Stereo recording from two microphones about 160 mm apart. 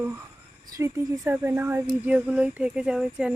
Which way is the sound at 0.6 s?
20° right (ahead or behind).